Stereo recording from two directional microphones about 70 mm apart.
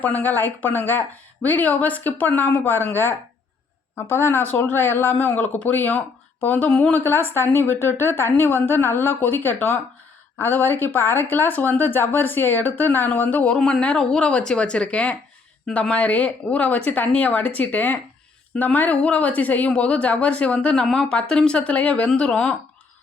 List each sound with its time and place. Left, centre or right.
0.0 s a woman's voice: left
6.7 s speech: centre
6.9 s a woman's voice: left
13.4 s speech: centre